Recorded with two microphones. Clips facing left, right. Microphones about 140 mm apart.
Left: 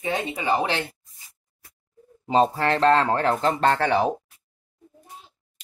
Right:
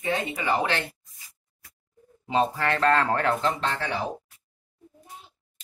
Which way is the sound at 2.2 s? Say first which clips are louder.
Left 4 dB; 35° left (ahead or behind).